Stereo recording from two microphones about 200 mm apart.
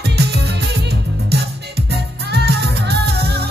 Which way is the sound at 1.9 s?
55° right (ahead or behind).